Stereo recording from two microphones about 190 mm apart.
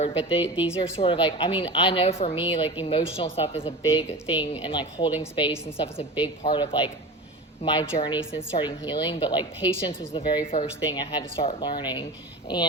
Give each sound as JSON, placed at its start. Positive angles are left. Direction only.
{"t": 0.0, "sound": "a woman's voice", "side_deg": 30}